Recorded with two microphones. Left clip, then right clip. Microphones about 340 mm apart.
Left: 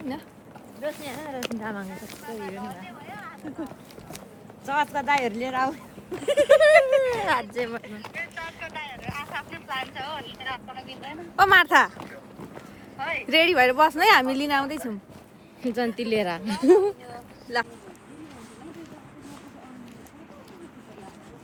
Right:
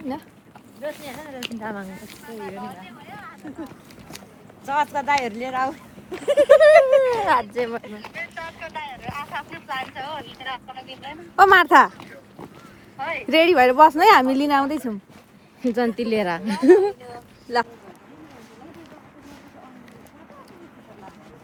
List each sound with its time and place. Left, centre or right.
0.8 s speech: centre
8.1 s boat: centre
10.4 s speech: centre
11.3 s speech: centre
15.6 s speech: centre